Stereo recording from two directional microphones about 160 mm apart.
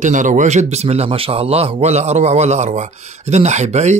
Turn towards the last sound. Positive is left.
turn(degrees=-45)  # may be behind; listen again after turning